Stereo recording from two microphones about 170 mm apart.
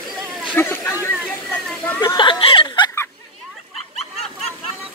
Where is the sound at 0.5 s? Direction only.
15° left (ahead or behind).